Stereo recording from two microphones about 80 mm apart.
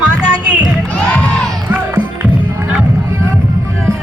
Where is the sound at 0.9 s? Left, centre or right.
Centre.